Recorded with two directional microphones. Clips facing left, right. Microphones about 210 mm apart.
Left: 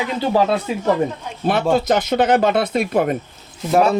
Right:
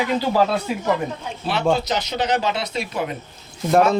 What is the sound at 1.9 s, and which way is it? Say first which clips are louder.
Speech: left 7 dB; 55° left (ahead or behind).